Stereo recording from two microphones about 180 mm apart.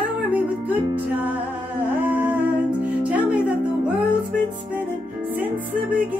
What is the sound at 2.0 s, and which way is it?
Humming, 10° right (ahead or behind).